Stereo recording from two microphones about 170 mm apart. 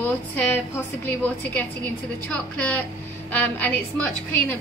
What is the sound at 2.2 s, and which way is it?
A woman's voice, 10° left (ahead or behind).